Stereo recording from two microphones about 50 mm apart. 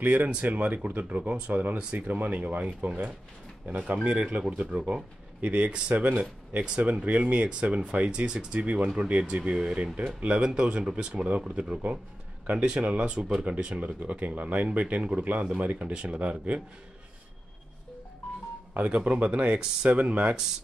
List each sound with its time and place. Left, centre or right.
0.0 s speech: right
3.6 s speech: right
13.7 s speech: right
18.8 s speech: right